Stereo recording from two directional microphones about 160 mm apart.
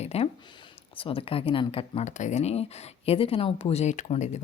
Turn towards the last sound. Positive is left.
turn(degrees=45)  # may be behind; listen again after turning